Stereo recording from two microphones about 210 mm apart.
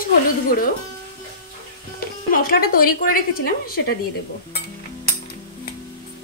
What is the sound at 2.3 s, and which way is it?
A woman's voice, 45° left (ahead or behind).